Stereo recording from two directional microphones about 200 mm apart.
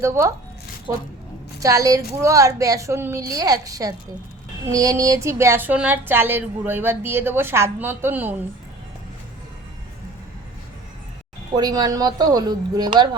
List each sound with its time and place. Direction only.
0.0 s speech: 15° right (ahead or behind)
1.5 s speech: 15° right (ahead or behind)
11.5 s speech: 20° right (ahead or behind)